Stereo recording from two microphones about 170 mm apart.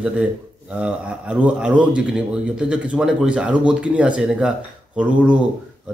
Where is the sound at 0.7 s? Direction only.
5° right (ahead or behind).